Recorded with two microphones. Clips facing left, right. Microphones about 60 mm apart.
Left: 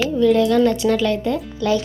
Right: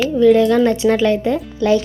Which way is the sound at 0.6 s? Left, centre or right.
Right.